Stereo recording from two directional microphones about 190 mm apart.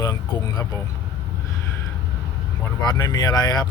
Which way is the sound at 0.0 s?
20° left (ahead or behind).